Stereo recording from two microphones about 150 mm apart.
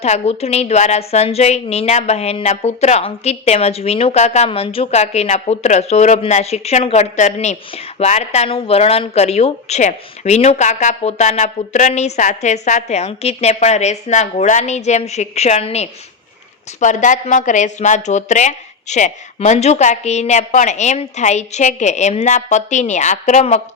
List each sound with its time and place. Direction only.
0.0 s speech: 45° left (ahead or behind)
16.8 s speech: 55° left (ahead or behind)